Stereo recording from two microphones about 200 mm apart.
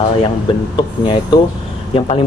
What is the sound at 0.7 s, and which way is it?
Speech, 25° left (ahead or behind).